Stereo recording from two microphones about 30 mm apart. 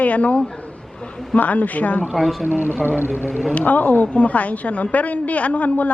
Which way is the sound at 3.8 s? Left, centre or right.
Left.